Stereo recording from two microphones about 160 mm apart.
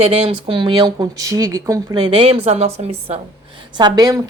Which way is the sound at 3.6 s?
25° right (ahead or behind).